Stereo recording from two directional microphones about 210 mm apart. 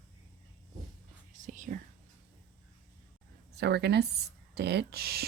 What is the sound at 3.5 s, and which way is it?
Speech, 55° right (ahead or behind).